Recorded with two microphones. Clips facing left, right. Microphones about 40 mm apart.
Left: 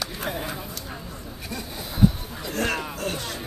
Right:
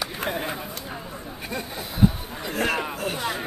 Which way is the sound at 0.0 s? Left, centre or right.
Centre.